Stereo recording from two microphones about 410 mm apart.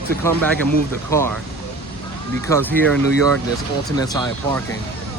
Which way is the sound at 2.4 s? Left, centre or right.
Centre.